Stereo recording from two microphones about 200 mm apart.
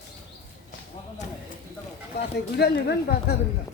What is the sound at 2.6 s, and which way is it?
Speech, 55° left (ahead or behind).